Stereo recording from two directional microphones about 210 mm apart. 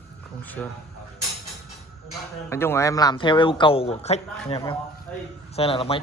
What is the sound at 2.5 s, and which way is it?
A man's voice, 10° left (ahead or behind).